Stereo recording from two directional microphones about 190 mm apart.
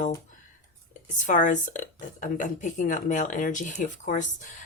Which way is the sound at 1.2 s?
40° left (ahead or behind).